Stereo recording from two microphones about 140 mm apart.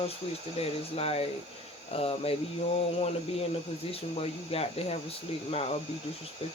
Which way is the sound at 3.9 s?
45° left (ahead or behind).